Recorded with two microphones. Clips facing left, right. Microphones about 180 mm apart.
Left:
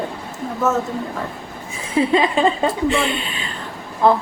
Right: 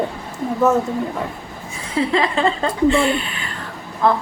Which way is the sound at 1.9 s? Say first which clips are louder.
Left 2 dB; 20° left (ahead or behind).